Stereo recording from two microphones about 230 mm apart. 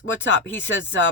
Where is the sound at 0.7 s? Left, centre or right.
Left.